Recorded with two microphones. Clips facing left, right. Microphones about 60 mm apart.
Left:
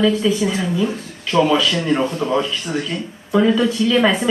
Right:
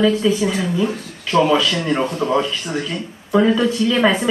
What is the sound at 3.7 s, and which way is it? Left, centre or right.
Speech, right.